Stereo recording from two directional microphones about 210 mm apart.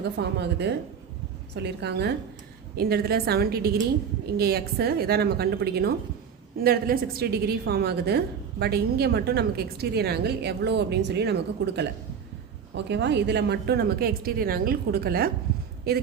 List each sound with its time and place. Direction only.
0.2 s a woman's voice: 55° right (ahead or behind)